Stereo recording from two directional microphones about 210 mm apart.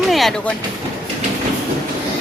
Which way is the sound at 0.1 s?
Centre (ahead or behind).